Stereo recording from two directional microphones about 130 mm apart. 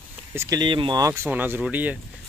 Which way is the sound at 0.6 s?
35° right (ahead or behind).